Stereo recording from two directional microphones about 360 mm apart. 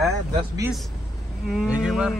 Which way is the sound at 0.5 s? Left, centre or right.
Centre.